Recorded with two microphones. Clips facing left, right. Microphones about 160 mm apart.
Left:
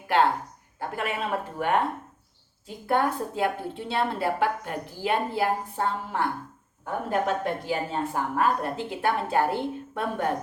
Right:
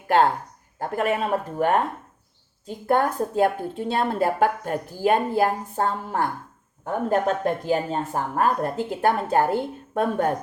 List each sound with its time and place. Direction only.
0.1 s a woman's voice: 45° right (ahead or behind)